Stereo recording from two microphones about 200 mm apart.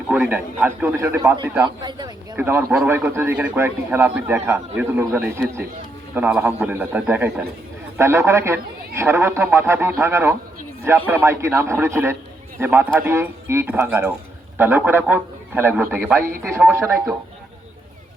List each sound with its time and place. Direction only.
0.1 s a man's voice: 10° right (ahead or behind)
1.6 s speech: 20° right (ahead or behind)
2.3 s a man's voice: 10° right (ahead or behind)